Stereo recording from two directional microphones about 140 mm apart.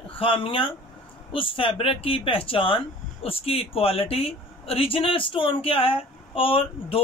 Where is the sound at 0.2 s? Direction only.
40° left (ahead or behind).